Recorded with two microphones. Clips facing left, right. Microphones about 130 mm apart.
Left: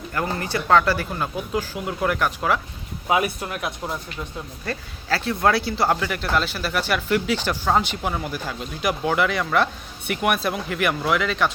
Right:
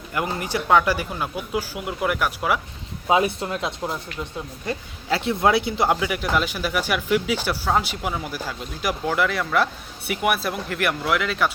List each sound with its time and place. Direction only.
0.1 s speech: 15° right (ahead or behind)
3.1 s speech: 25° right (ahead or behind); by 11.5 s 5° right (ahead or behind)